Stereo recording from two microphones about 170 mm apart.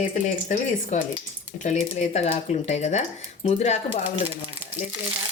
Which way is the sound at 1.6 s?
40° left (ahead or behind).